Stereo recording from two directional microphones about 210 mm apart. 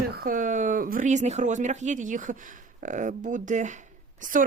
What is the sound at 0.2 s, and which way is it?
Speech, 40° right (ahead or behind).